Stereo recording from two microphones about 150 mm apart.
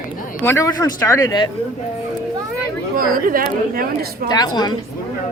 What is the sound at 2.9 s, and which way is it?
Speech, 70° right (ahead or behind).